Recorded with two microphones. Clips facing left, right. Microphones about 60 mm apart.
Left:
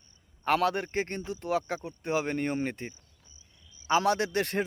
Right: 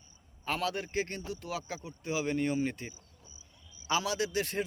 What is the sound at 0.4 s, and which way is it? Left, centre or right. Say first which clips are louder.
A man's voice: left 7 dB; left.